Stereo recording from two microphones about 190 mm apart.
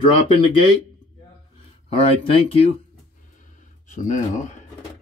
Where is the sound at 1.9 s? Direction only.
30° left (ahead or behind).